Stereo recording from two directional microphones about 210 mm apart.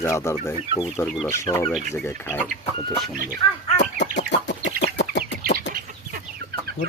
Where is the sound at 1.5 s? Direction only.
25° left (ahead or behind).